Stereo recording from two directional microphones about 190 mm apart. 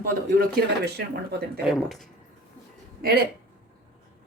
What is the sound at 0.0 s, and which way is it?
Speech, 50° right (ahead or behind).